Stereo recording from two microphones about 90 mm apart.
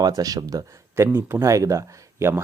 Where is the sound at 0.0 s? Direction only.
40° right (ahead or behind).